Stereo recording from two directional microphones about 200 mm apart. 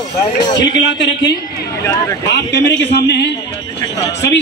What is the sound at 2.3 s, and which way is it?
A man's voice, 60° left (ahead or behind).